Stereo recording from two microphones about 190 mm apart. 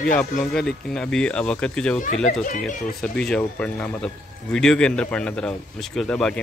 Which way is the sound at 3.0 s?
5° left (ahead or behind).